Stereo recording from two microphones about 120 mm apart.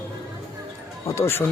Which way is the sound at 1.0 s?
25° left (ahead or behind).